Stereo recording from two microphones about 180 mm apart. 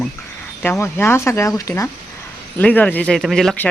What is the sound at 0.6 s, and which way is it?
Speech, 15° left (ahead or behind).